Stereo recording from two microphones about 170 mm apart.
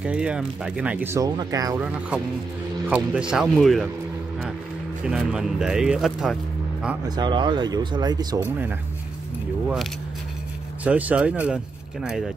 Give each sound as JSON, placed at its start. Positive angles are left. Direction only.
{"t": 0.0, "sound": "speech", "side_deg": -5}
{"t": 2.9, "sound": "speech", "side_deg": -5}
{"t": 5.0, "sound": "speech", "side_deg": -5}
{"t": 7.2, "sound": "speech", "side_deg": -25}
{"t": 10.8, "sound": "speech", "side_deg": -10}